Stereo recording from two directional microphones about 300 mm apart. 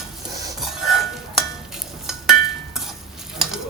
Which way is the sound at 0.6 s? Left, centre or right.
Centre.